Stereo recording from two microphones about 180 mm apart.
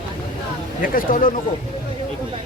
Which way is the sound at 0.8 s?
50° left (ahead or behind).